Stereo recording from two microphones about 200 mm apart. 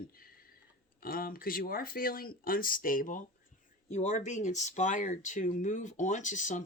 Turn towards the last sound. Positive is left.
turn(degrees=40)  # may be behind; listen again after turning